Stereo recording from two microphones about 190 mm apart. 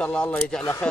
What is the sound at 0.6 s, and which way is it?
Speech, 15° left (ahead or behind).